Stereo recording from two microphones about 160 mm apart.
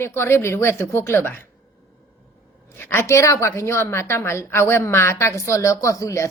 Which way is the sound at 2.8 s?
15° left (ahead or behind).